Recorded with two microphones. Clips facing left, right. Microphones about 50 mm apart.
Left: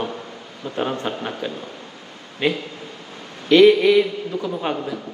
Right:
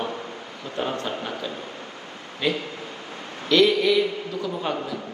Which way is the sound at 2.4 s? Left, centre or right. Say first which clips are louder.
Left 3 dB; left.